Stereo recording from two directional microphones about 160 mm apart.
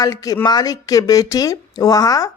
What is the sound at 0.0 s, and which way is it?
A man's voice, 20° left (ahead or behind).